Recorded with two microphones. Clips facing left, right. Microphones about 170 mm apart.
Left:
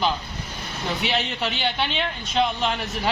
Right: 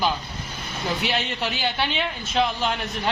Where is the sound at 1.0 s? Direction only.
Centre (ahead or behind).